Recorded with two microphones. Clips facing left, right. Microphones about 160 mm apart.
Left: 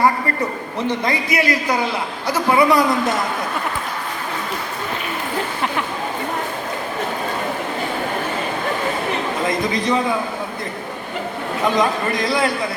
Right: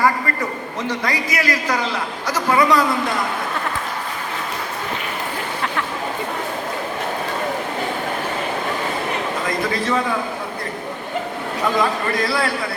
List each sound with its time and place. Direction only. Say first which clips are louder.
0.9 s a man's voice: left 3 dB; 25° left (ahead or behind)
2.5 s a man's voice: left 2 dB; 15° left (ahead or behind)
9.5 s a man's voice: left 1 dB; 20° left (ahead or behind)
11.8 s a man's voice: left 1 dB; 20° left (ahead or behind)